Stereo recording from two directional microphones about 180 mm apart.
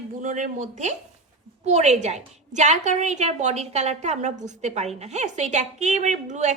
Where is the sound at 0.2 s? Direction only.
45° right (ahead or behind).